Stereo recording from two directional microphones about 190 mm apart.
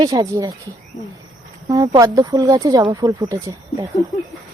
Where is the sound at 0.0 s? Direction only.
20° right (ahead or behind).